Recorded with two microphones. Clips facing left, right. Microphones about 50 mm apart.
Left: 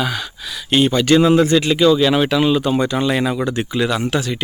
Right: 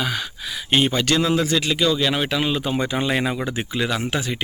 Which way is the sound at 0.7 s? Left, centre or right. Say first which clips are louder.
Left 4 dB; centre.